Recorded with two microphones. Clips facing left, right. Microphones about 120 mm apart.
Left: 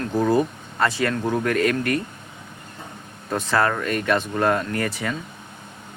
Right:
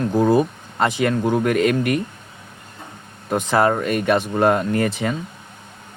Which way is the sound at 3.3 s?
15° right (ahead or behind).